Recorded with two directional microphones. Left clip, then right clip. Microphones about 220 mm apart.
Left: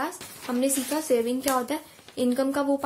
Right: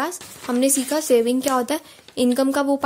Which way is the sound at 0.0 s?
45° right (ahead or behind).